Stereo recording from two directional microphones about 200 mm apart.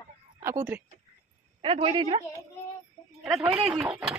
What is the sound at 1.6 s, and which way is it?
Speech, 25° right (ahead or behind).